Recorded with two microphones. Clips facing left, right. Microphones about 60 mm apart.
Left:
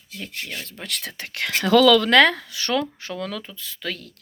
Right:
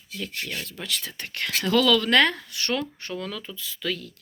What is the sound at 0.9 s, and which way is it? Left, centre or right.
Speech, left.